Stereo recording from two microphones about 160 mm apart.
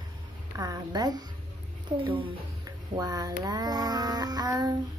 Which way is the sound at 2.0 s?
35° right (ahead or behind).